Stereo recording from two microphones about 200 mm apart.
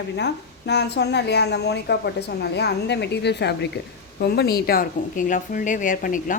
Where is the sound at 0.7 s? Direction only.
55° left (ahead or behind).